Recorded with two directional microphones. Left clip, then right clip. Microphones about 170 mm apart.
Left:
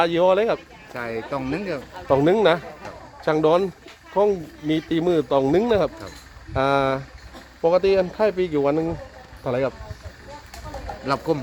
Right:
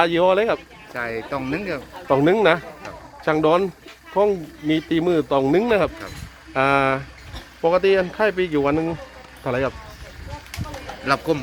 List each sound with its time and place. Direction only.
0.0 s speech: 15° right (ahead or behind)
0.9 s speech: 10° left (ahead or behind)
2.0 s speech: 10° right (ahead or behind)
11.0 s speech: 15° left (ahead or behind)